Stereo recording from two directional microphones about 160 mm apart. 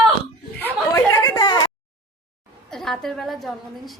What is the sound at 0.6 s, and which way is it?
Chatter, 20° left (ahead or behind).